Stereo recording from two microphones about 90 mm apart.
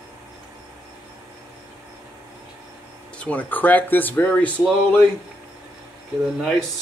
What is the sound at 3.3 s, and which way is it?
Speech, 15° left (ahead or behind).